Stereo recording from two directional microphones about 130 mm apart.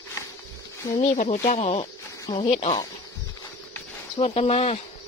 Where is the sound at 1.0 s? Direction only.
60° left (ahead or behind).